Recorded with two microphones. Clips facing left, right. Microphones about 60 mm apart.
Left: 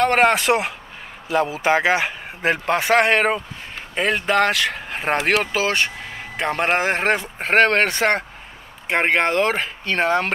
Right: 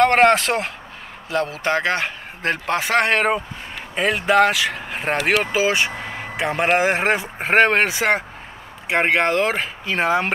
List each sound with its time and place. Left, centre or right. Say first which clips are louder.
0.0 s a man's voice: right 2 dB; centre
5.5 s a man's voice: right 2 dB; centre